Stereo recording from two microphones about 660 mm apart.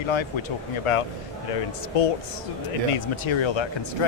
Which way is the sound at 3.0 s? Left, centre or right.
Left.